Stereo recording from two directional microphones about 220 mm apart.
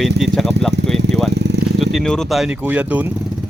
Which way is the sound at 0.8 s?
55° right (ahead or behind).